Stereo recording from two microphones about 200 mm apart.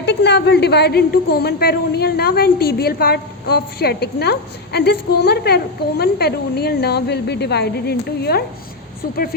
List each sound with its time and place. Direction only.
0.0 s a woman's voice: 60° left (ahead or behind)